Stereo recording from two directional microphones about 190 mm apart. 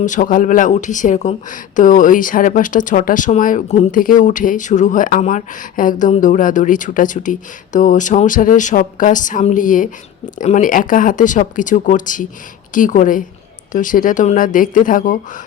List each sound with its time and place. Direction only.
0.0 s speech: 40° left (ahead or behind)